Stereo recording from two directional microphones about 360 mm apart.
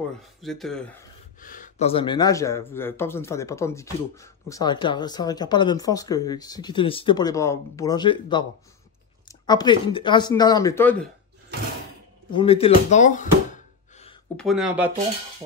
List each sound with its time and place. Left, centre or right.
0.4 s speech: centre
1.4 s speech: left; by 11.1 s centre
12.3 s gasp: centre
14.3 s speech: centre